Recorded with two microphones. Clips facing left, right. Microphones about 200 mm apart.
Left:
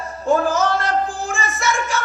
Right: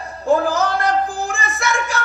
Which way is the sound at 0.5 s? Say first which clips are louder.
Right 1 dB; 60° right (ahead or behind).